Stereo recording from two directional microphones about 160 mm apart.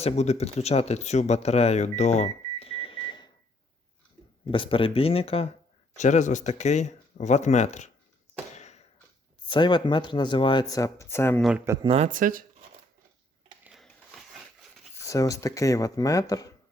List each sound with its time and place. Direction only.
0.0 s speech: 45° left (ahead or behind)
4.5 s speech: 35° left (ahead or behind)
8.5 s a sound: 45° left (ahead or behind)
9.5 s speech: 30° left (ahead or behind)
11.6 s speech: 15° right (ahead or behind)
11.9 s speech: 45° right (ahead or behind)
13.7 s a sound: centre (ahead or behind)
14.9 s speech: 20° left (ahead or behind)